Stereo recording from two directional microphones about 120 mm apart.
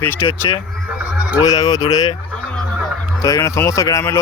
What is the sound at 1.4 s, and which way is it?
Speech, 30° left (ahead or behind).